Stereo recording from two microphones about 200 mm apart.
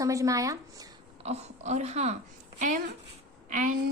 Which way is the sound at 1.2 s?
35° right (ahead or behind).